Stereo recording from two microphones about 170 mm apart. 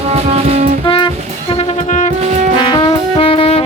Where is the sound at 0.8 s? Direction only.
30° left (ahead or behind).